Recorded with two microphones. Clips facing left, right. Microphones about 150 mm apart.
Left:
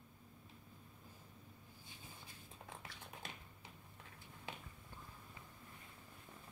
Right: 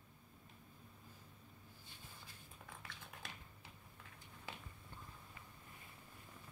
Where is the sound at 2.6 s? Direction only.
25° left (ahead or behind).